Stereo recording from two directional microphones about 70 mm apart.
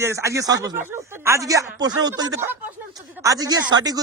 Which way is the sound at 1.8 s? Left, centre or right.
Right.